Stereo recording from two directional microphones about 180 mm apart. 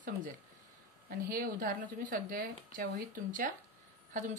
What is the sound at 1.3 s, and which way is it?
Speech, 50° right (ahead or behind).